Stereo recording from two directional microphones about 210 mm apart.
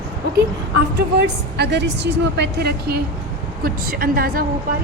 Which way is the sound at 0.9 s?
55° right (ahead or behind).